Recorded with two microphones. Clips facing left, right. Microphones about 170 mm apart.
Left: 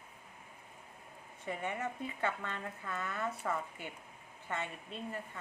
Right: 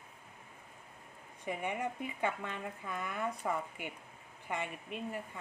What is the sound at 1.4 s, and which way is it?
Speech, 15° right (ahead or behind).